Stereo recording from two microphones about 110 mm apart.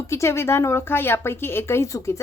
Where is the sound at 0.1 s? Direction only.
25° left (ahead or behind).